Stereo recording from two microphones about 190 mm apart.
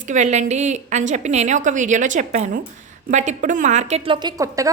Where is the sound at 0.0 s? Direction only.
40° right (ahead or behind).